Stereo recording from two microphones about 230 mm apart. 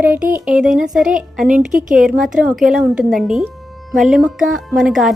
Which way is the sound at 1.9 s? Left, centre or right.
Centre.